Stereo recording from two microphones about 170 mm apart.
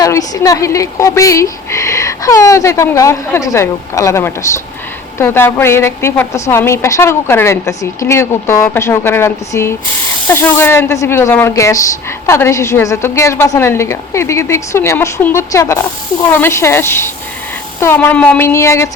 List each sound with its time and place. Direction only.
0.0 s a woman's voice: 20° left (ahead or behind)